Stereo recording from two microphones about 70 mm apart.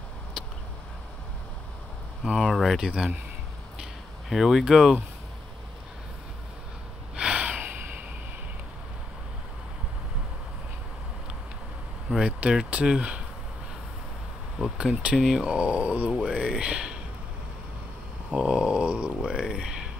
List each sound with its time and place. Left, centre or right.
2.5 s speech: centre
2.8 s speech: centre
4.3 s speech: centre
7.2 s a sound: centre
12.3 s speech: right
14.8 s speech: centre
18.3 s speech: centre